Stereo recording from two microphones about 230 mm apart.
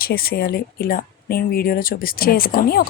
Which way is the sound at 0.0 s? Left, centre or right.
Left.